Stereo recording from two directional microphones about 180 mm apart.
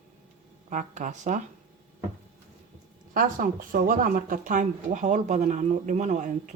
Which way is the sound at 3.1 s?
50° right (ahead or behind).